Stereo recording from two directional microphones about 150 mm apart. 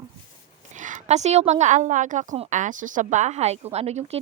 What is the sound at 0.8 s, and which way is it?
Speech, 50° right (ahead or behind).